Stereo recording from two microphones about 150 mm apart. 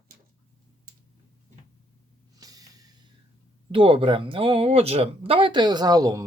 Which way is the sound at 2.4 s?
25° right (ahead or behind).